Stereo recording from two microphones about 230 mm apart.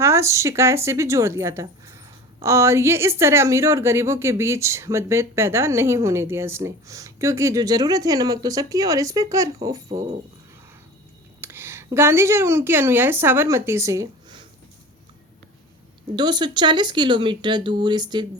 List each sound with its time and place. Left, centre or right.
0.0 s speech: centre
11.3 s speech: centre
16.1 s speech: centre